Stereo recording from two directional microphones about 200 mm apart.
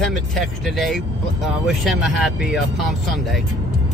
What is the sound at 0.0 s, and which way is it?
Speech, centre (ahead or behind).